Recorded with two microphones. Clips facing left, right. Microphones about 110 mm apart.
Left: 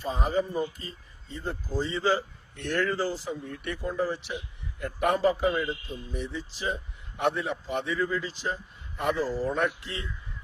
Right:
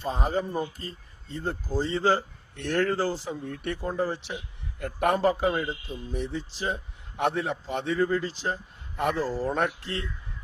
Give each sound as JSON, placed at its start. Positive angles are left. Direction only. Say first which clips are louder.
{"t": 0.1, "sound": "speech", "louder": "even", "side_deg": -55}
{"t": 6.1, "sound": "a man's voice", "louder": "right 3 dB", "side_deg": -60}